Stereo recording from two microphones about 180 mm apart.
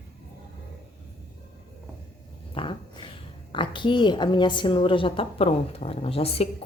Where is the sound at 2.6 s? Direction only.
25° left (ahead or behind).